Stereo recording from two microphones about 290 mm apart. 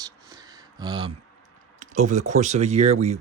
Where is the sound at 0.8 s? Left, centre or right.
Centre.